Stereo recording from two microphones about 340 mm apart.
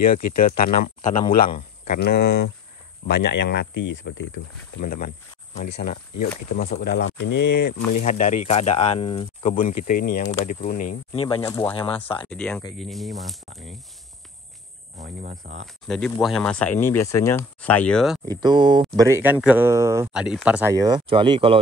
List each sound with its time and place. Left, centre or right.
0.4 s speech: left
12.3 s speech: centre
15.0 s speech: right
15.6 s speech: centre
18.3 s speech: centre